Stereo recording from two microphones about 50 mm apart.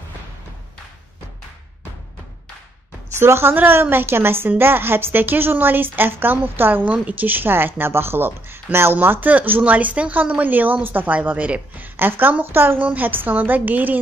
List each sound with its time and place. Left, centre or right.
3.2 s a woman's voice: right
3.5 s a woman's voice: right
8.9 s a woman's voice: right
9.6 s a woman's voice: right